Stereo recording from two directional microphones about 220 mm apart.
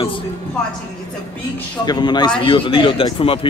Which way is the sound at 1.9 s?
20° left (ahead or behind).